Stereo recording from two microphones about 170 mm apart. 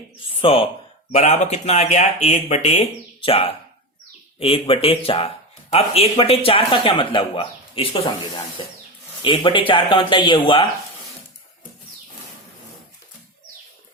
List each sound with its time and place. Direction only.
0.4 s speech: 35° left (ahead or behind)